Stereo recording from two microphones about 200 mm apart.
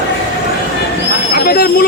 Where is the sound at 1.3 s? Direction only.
50° left (ahead or behind).